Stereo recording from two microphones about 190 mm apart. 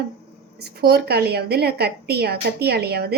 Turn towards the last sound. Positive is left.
turn(degrees=-55)  # may be behind; listen again after turning